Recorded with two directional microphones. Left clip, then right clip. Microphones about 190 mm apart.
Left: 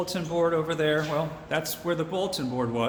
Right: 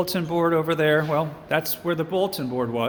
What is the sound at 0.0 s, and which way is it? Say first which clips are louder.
A man's voice: right 3 dB; 40° right (ahead or behind).